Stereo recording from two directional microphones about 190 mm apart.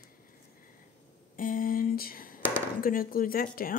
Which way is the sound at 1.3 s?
45° left (ahead or behind).